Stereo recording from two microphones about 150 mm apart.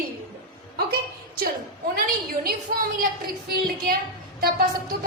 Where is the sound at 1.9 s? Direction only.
80° right.